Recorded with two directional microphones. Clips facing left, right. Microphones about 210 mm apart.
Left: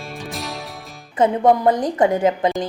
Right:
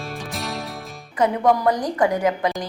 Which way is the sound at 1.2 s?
25° left (ahead or behind).